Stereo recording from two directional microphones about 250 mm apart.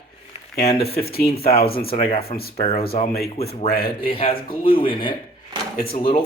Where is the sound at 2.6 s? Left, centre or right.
Left.